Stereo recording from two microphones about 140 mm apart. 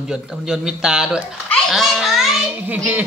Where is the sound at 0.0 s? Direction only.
5° right (ahead or behind).